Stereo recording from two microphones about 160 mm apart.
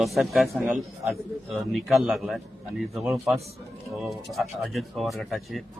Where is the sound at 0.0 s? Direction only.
Centre (ahead or behind).